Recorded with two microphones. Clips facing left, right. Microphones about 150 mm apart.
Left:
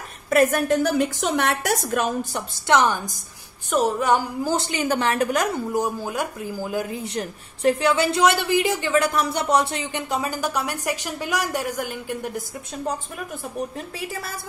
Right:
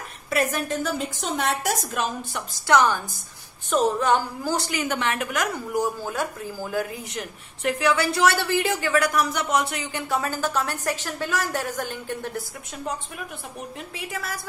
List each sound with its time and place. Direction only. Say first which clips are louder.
0.3 s a woman's voice: left 6 dB; 50° left (ahead or behind)
2.6 s a woman's voice: even; 20° left (ahead or behind)
4.6 s a woman's voice: left 3 dB; 25° left (ahead or behind)
5.8 s speech: right 2 dB; 20° left (ahead or behind)
7.2 s a woman's voice: left 5 dB; 30° left (ahead or behind); by 12.4 s 10° left (ahead or behind)